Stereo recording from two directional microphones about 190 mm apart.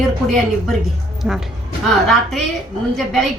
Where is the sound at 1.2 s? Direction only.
5° right (ahead or behind).